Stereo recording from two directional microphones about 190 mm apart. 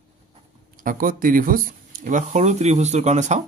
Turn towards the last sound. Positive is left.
turn(degrees=-40)  # may be behind; listen again after turning